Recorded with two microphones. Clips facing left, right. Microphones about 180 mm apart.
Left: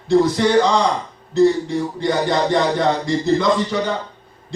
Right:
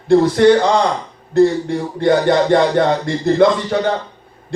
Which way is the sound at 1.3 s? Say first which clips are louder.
Right 2 dB; 55° right (ahead or behind).